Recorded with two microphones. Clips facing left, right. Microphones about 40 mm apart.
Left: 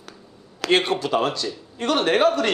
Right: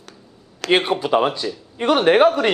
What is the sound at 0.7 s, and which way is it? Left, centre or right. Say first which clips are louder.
Speech: right 3 dB; centre.